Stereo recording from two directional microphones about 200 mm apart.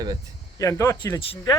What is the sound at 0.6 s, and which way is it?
Speech, 15° left (ahead or behind).